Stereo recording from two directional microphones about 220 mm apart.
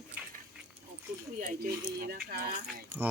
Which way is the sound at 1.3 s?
35° right (ahead or behind).